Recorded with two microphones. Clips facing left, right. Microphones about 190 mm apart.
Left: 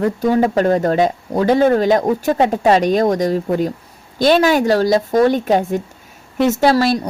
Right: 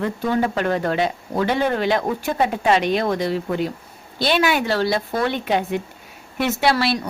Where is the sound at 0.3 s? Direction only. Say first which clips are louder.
Left 5 dB; 40° left (ahead or behind).